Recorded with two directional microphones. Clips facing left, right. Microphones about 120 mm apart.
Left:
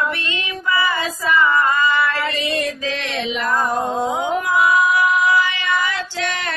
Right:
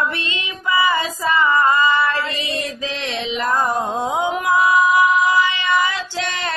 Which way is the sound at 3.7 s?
20° right (ahead or behind).